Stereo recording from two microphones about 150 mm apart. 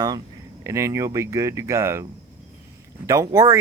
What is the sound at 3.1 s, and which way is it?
Speech, 20° right (ahead or behind).